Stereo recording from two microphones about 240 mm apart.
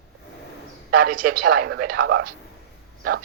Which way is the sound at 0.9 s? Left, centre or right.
Right.